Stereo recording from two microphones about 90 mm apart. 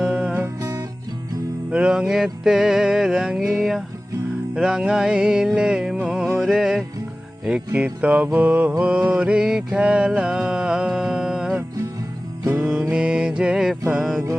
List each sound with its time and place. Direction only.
0.0 s music: 5° right (ahead or behind)
0.3 s music: 35° right (ahead or behind)
1.7 s music: 10° right (ahead or behind)
8.0 s music: 15° right (ahead or behind)
8.8 s mantra: 15° right (ahead or behind)
12.5 s music: 15° right (ahead or behind)
12.9 s mantra: 10° right (ahead or behind)
13.9 s music: 5° right (ahead or behind)